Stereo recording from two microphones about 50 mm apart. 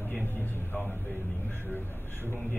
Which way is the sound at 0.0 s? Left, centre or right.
Left.